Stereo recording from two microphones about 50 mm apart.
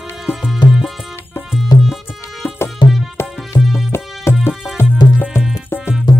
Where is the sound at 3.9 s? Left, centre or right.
Left.